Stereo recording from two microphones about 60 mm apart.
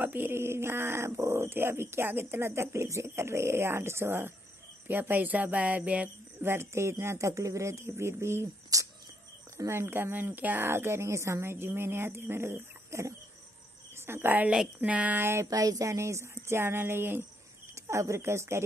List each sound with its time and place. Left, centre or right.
0.0 s speech: right
6.4 s speech: right
8.7 s speech: right
9.7 s speech: right
10.7 s speech: right
14.0 s a woman's voice: right
14.3 s speech: right
15.1 s speech: right
15.5 s speech: right
15.9 s speech: right
17.7 s speech: right